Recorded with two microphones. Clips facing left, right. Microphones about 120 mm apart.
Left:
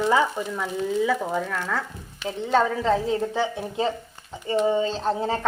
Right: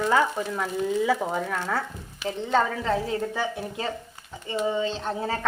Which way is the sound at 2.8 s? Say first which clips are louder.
Left 3 dB; 25° left (ahead or behind).